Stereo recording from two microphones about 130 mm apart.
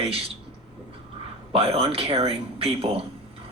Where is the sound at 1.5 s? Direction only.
50° right (ahead or behind).